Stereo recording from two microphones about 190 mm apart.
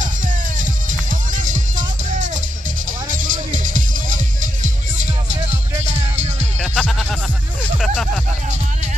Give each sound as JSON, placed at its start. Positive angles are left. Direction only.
{"t": 1.3, "sound": "music", "side_deg": -45}
{"t": 6.6, "sound": "music", "side_deg": 0}